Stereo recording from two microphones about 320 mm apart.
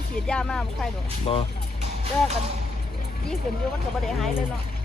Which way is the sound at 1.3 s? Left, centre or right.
Centre.